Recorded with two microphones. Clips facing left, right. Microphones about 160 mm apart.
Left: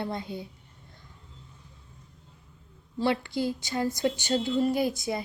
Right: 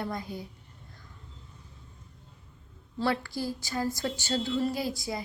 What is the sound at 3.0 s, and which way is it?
A woman's voice, 20° left (ahead or behind).